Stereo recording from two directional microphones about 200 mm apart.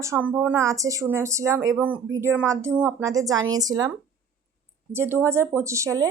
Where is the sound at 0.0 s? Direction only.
10° right (ahead or behind).